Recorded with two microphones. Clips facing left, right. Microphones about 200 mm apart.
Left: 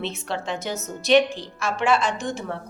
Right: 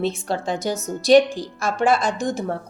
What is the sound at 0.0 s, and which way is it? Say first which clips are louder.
A woman's voice: right 5 dB; 35° right (ahead or behind).